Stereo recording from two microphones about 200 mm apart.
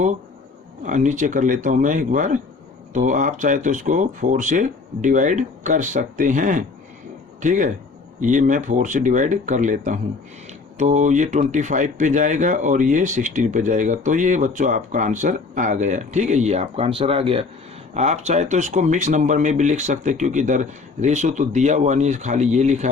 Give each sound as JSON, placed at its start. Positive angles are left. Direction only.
{"t": 0.9, "sound": "speech", "side_deg": -40}